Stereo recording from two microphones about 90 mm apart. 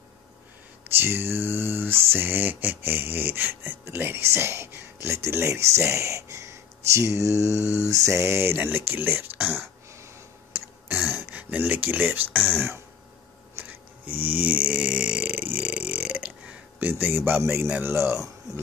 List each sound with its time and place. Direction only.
0.9 s mantra: 25° right (ahead or behind)
11.1 s speech: 20° right (ahead or behind)
13.6 s a sound: 20° right (ahead or behind)
14.2 s burping: 20° right (ahead or behind)
17.8 s speech: 30° right (ahead or behind)